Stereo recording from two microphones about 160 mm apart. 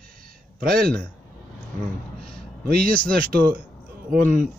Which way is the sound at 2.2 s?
65° right (ahead or behind).